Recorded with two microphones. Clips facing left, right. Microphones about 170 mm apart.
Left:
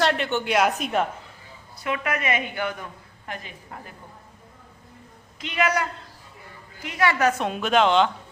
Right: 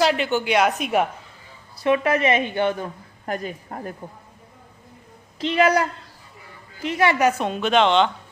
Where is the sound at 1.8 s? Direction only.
30° right (ahead or behind).